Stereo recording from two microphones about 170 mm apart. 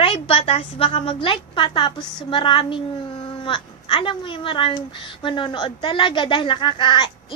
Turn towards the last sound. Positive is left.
turn(degrees=25)  # may be behind; listen again after turning